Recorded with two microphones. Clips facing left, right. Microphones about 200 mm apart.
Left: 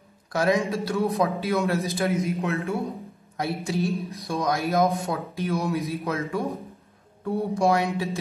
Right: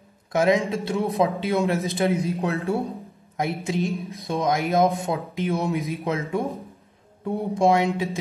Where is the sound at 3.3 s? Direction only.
15° right (ahead or behind).